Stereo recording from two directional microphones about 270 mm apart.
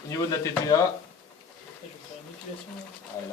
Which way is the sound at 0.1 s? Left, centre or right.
Centre.